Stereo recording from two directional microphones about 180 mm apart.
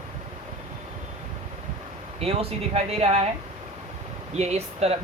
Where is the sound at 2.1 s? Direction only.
35° right (ahead or behind).